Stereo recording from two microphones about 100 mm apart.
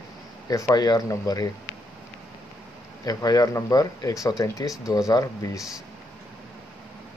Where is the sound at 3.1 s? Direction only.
40° left (ahead or behind).